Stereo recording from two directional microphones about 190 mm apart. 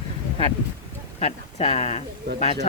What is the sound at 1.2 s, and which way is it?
Speech, 35° left (ahead or behind).